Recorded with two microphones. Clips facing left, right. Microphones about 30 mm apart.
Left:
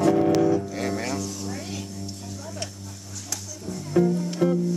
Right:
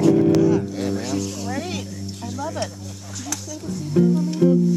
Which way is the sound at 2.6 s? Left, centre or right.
Right.